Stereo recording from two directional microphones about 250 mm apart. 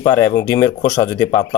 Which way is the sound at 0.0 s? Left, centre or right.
Centre.